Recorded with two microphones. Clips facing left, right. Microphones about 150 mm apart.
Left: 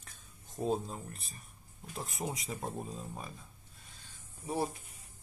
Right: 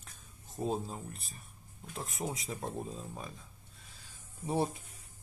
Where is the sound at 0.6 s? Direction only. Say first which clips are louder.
Left 1 dB; centre (ahead or behind).